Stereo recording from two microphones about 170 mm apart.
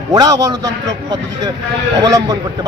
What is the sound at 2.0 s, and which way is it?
Speech, 25° right (ahead or behind).